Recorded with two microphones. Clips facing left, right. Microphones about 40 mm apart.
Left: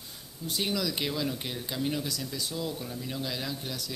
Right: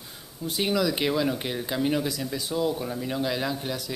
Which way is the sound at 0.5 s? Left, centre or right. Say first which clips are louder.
Right 6 dB; centre.